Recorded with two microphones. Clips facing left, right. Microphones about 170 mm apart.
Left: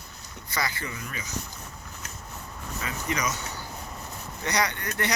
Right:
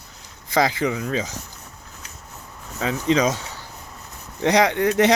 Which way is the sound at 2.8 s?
90° right.